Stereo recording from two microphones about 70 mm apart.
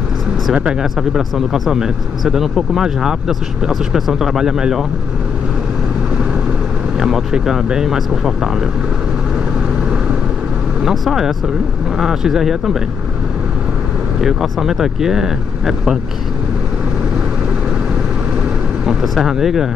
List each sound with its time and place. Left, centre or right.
0.7 s speech: centre
7.0 s speech: centre
10.9 s speech: centre
14.2 s speech: centre
18.9 s speech: centre